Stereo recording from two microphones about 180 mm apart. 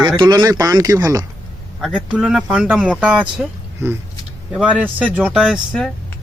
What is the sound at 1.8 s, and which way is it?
Speech, 5° right (ahead or behind).